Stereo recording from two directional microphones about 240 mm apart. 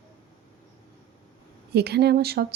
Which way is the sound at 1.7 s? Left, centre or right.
Right.